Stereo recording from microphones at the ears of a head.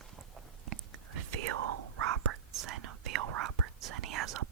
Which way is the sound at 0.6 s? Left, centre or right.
Right.